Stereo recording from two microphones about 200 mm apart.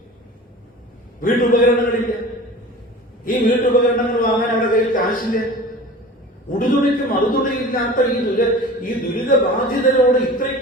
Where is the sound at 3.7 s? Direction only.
45° left (ahead or behind).